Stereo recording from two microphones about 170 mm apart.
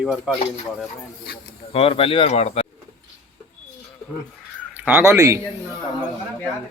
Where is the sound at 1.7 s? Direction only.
35° left (ahead or behind).